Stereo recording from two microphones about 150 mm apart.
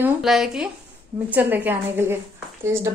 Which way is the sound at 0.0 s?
5° right (ahead or behind).